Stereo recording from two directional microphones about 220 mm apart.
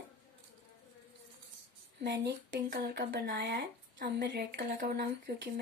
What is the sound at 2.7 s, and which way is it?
A woman's voice, 40° right (ahead or behind).